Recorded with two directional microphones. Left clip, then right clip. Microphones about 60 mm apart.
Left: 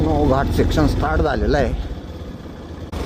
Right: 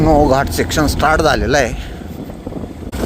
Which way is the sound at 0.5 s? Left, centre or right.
Right.